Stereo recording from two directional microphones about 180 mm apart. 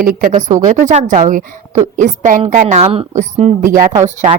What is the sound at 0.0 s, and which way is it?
A woman's voice, 50° right (ahead or behind).